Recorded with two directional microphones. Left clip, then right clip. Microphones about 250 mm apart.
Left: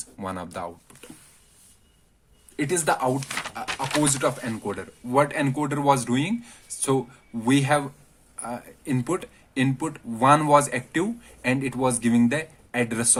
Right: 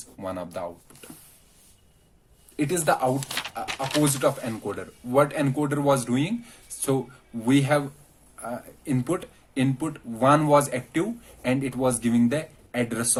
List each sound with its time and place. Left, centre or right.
0.2 s speech: left
2.6 s speech: left
7.4 s speech: left